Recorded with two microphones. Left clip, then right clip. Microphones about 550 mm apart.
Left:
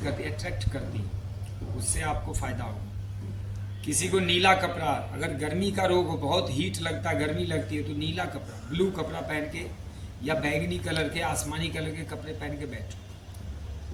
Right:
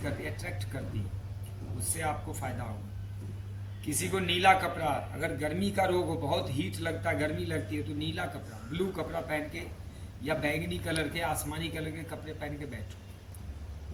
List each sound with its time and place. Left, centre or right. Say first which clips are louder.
0.0 s a sound: left 4 dB; right
2.0 s a man's voice: left 2 dB; right
3.8 s a man's voice: left 5 dB; right